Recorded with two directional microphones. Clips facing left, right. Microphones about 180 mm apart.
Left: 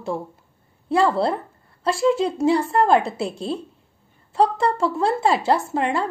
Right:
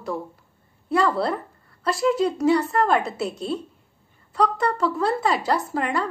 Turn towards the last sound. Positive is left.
turn(degrees=25)  # may be behind; listen again after turning